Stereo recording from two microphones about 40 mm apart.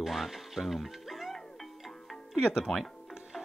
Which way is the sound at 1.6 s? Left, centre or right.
Centre.